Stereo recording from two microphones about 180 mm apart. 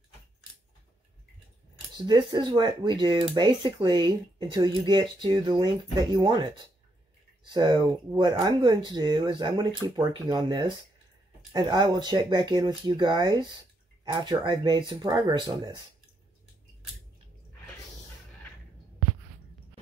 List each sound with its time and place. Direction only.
2.0 s speech: 25° right (ahead or behind)